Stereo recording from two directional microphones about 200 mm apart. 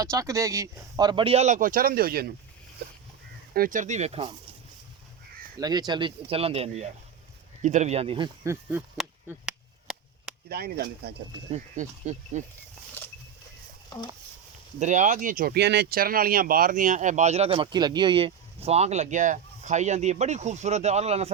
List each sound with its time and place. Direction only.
0.0 s speech: 15° right (ahead or behind); by 2.3 s 50° right (ahead or behind)
3.5 s speech: 45° right (ahead or behind)
5.5 s speech: 20° right (ahead or behind)
9.0 s a sound: 5° right (ahead or behind)
10.5 s speech: 50° right (ahead or behind)
11.5 s speech: 35° right (ahead or behind)
13.0 s a sound: 10° left (ahead or behind)
14.8 s speech: 35° right (ahead or behind)